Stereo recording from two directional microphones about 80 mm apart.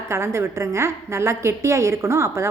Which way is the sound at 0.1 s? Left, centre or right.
Right.